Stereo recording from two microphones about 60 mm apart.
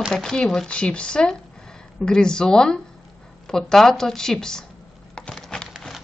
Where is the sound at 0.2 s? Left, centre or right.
Centre.